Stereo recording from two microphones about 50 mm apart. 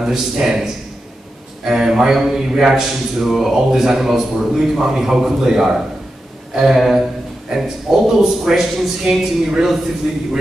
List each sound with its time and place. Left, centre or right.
0.0 s a man's voice: centre
9.1 s speech: right
9.5 s a man's voice: centre